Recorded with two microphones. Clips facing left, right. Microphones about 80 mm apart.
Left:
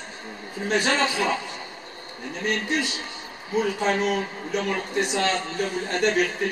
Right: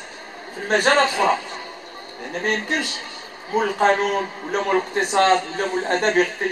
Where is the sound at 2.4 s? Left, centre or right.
Right.